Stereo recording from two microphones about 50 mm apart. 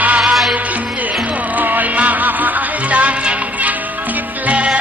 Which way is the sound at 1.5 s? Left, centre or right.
Right.